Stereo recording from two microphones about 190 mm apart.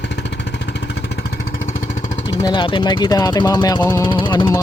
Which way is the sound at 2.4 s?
25° left (ahead or behind).